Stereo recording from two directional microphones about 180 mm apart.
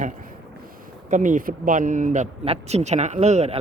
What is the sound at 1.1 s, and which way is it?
Speech, 45° right (ahead or behind).